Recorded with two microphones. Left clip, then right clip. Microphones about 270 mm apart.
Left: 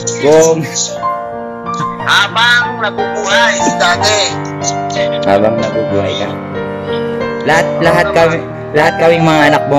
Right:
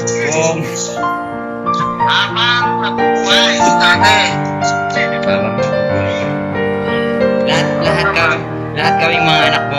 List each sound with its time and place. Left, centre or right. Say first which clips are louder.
0.3 s music: left 10 dB; left
1.7 s music: even; left
4.0 s speech: right 2 dB; centre
7.4 s music: left 4 dB; left